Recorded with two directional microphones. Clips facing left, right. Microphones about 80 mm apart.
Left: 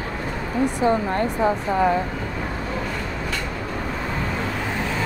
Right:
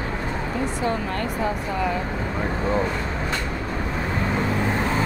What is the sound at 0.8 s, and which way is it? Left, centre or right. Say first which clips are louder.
Speech: left 7 dB; left.